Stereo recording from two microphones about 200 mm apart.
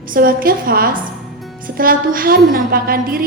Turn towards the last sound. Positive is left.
turn(degrees=-50)  # may be behind; listen again after turning